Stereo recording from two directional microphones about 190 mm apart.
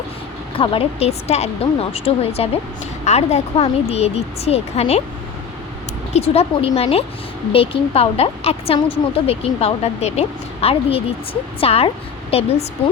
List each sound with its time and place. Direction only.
0.6 s speech: 30° left (ahead or behind)
6.1 s speech: 30° left (ahead or behind)